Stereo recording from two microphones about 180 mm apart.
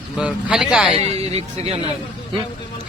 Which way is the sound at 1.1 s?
35° right (ahead or behind).